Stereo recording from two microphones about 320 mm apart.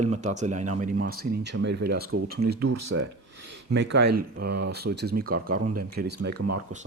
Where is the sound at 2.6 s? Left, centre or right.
Right.